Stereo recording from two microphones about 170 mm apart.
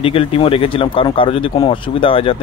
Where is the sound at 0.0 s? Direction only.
35° left (ahead or behind).